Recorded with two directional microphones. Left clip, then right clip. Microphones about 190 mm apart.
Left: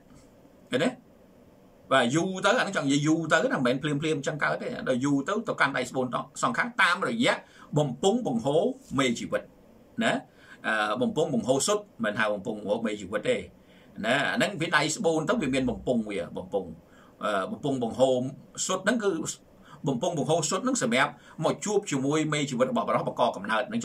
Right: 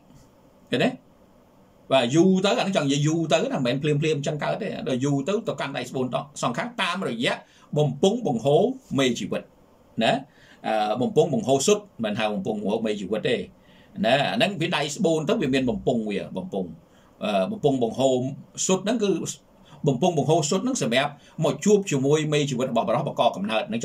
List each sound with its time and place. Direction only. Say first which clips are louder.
0.7 s a man's voice: right 3 dB; 15° right (ahead or behind)